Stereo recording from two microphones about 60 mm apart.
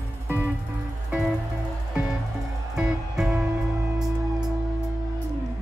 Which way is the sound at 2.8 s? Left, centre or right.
Centre.